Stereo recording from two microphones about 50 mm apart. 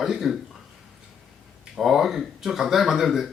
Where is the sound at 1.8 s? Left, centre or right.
Centre.